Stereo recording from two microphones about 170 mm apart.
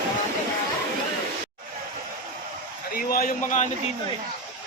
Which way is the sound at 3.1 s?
50° left (ahead or behind).